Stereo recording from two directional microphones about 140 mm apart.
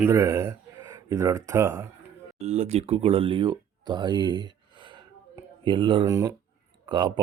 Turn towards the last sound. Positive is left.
turn(degrees=-30)  # may be behind; listen again after turning